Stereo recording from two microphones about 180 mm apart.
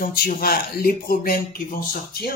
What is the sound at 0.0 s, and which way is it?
Speech, 55° left (ahead or behind).